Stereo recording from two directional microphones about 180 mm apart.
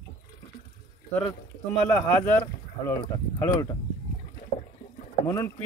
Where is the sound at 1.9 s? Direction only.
10° left (ahead or behind).